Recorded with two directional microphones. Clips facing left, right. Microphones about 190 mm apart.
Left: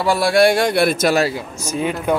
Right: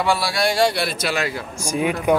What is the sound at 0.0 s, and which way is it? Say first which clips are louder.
A man's voice: left 6 dB; 50° left (ahead or behind).